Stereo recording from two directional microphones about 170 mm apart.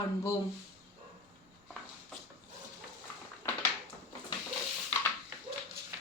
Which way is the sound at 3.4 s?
15° left (ahead or behind).